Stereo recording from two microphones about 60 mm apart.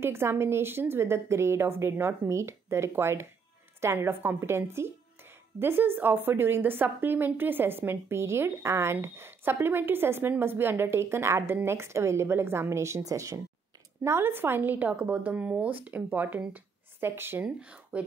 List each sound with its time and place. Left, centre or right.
0.0 s a woman's voice: right
4.4 s a woman's voice: right
14.0 s speech: right
17.0 s a woman's voice: right
17.5 s speech: centre